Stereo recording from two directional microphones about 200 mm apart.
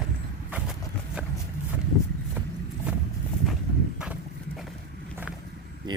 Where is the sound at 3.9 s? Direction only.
5° right (ahead or behind).